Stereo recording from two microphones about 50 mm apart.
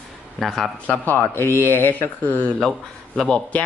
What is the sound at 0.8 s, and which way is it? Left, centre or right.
Speech, left.